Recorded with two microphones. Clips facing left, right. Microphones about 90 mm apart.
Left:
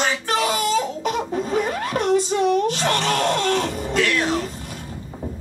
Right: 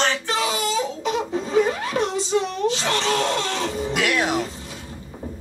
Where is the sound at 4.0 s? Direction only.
15° right (ahead or behind).